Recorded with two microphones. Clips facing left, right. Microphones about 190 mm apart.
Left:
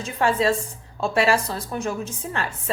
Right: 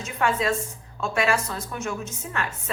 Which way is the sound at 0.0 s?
30° left (ahead or behind).